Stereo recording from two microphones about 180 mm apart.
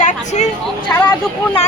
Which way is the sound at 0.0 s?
40° left (ahead or behind).